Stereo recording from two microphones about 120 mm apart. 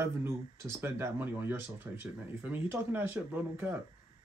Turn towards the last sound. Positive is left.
turn(degrees=-15)  # may be behind; listen again after turning